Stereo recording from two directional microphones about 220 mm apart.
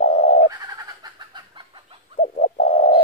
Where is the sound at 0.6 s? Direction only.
15° right (ahead or behind).